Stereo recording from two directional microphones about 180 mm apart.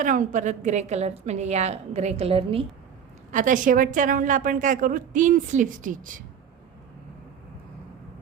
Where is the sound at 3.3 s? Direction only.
45° right (ahead or behind).